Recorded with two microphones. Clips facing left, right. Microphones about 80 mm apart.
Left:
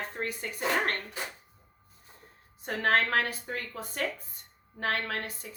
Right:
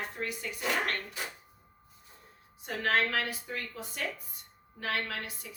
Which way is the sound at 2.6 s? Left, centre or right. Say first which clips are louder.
Left 3 dB; left.